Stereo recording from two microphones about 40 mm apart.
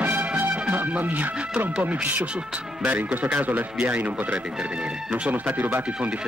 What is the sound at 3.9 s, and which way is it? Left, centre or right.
Speech, right.